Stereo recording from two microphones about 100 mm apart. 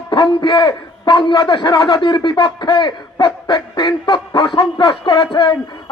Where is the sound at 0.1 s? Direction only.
50° left (ahead or behind).